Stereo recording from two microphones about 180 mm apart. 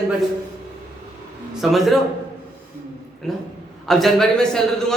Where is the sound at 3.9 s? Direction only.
Centre (ahead or behind).